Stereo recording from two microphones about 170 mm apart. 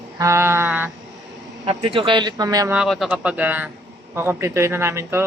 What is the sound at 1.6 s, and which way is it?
A man's voice, 30° right (ahead or behind).